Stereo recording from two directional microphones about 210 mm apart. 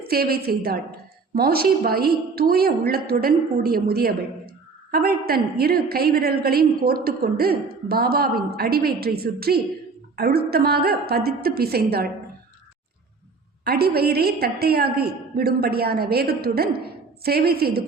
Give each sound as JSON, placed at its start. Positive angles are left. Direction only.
{"t": 0.0, "sound": "a woman's voice", "side_deg": -45}
{"t": 13.7, "sound": "a woman's voice", "side_deg": -50}